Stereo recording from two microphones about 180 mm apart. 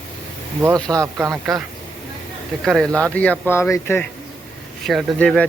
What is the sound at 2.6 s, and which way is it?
Speech, centre (ahead or behind).